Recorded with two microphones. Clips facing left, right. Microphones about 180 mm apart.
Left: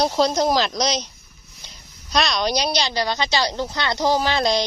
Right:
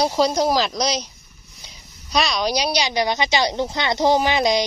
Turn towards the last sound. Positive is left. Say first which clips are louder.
# right 2 dB
turn(degrees=-15)  # may be behind; listen again after turning